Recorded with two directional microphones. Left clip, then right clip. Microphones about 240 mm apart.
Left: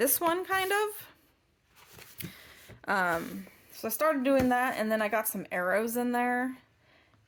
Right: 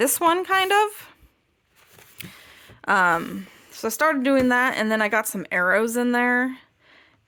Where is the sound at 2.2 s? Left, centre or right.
Right.